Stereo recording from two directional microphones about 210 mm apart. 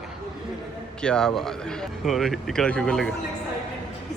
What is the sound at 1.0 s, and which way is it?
Speech, 5° left (ahead or behind).